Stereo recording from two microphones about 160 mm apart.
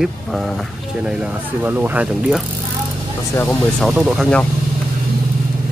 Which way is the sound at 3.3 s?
10° left (ahead or behind).